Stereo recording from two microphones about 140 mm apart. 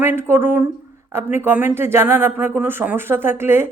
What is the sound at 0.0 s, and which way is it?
Speech, 15° right (ahead or behind).